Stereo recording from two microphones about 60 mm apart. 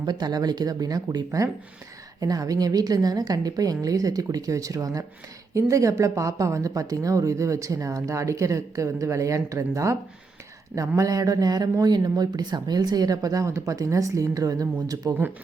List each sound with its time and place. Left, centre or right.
0.3 s a woman's voice: right
10.8 s a woman's voice: right
13.5 s speech: right